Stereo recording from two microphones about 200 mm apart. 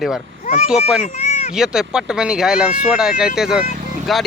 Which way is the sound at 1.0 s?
35° left (ahead or behind).